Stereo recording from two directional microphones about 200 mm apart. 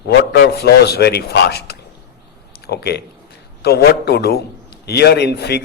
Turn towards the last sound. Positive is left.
turn(degrees=55)  # may be behind; listen again after turning